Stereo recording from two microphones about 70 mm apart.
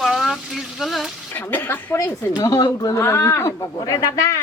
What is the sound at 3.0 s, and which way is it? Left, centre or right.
Speech, left.